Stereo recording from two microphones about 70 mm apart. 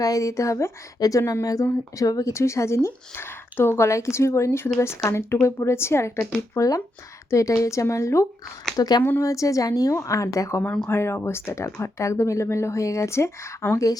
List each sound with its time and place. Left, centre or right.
0.0 s speech: left
0.9 s speech: left
1.2 s speech: left
2.3 s speech: left
6.5 s speech: left
8.7 s speech: left
9.2 s speech: left
9.9 s speech: left
10.8 s speech: left